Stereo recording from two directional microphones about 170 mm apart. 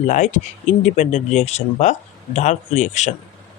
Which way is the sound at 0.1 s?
45° left (ahead or behind).